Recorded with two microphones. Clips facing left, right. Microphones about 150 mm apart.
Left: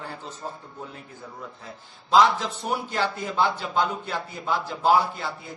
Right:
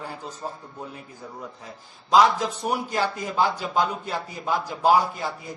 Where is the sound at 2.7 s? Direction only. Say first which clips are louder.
Left 1 dB; 10° right (ahead or behind).